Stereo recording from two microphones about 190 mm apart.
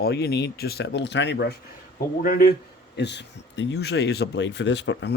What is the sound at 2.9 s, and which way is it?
Speech, 65° left (ahead or behind).